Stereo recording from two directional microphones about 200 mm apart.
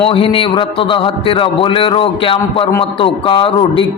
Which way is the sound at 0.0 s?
25° left (ahead or behind).